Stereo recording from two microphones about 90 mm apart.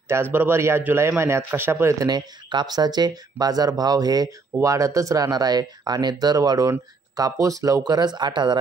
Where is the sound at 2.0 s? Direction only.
55° right (ahead or behind).